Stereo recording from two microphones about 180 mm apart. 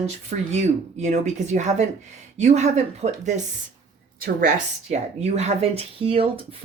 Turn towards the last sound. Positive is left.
turn(degrees=-30)  # may be behind; listen again after turning